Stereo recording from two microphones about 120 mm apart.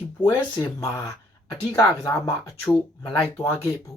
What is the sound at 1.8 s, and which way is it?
Speech, 30° left (ahead or behind).